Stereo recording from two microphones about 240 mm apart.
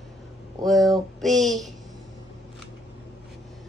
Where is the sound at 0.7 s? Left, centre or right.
Centre.